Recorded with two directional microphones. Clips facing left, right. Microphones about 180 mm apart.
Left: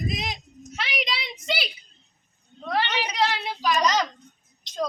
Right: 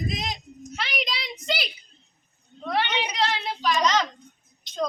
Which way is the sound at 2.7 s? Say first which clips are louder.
Even; 10° right (ahead or behind).